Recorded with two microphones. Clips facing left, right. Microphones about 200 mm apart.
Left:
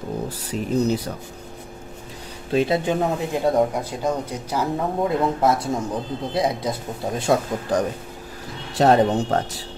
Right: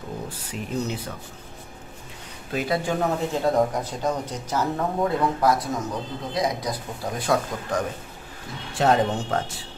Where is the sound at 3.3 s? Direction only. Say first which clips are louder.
Left 3 dB; 10° left (ahead or behind).